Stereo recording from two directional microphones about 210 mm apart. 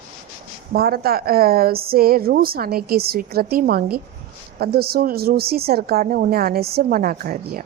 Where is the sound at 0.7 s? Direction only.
45° right (ahead or behind).